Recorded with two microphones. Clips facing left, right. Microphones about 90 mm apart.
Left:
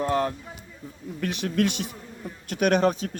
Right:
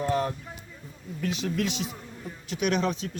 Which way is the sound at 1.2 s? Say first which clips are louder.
Left 4 dB; 65° left (ahead or behind).